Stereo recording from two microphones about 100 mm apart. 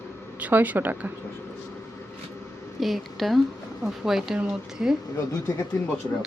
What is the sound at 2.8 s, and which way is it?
Speech, centre (ahead or behind).